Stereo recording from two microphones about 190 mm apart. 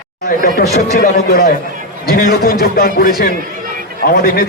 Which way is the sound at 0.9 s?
55° left (ahead or behind).